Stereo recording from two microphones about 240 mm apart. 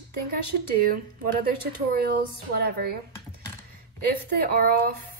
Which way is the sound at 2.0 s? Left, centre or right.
Right.